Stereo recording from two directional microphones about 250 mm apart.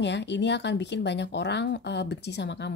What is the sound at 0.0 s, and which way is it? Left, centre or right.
Speech, left.